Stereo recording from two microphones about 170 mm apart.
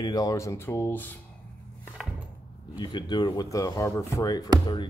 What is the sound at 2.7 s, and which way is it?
Speech, 25° left (ahead or behind).